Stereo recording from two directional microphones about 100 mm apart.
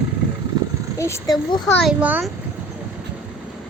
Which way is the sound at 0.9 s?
30° left (ahead or behind).